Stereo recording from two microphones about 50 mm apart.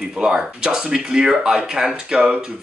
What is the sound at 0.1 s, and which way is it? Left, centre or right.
Speech, centre.